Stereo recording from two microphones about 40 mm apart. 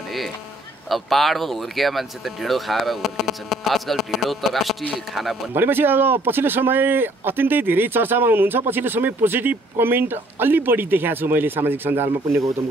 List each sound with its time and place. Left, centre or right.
0.8 s speech: centre
5.5 s speech: right